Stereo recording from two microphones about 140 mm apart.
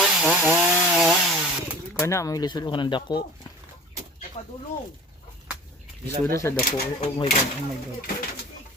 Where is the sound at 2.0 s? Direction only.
20° left (ahead or behind).